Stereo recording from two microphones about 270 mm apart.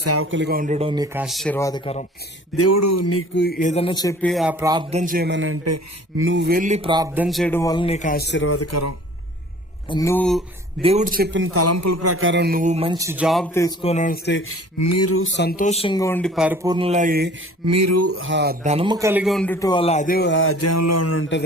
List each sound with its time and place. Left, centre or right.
0.0 s speech: right; by 2.0 s left
2.6 s speech: left
3.3 s speech: left; by 5.5 s right
5.6 s speech: right
6.2 s speech: right; by 9.0 s left
9.9 s speech: centre
10.8 s a man's voice: right; by 13.7 s centre
13.8 s speech: left
14.8 s speech: left; by 16.6 s centre
16.6 s speech: centre
17.7 s speech: right
18.6 s speech: right; by 21.4 s left